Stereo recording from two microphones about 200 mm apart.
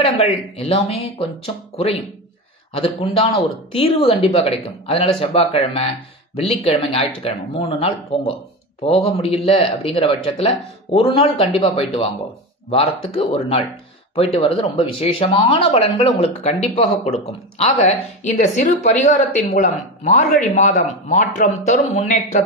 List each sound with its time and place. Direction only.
0.0 s speech: 30° left (ahead or behind)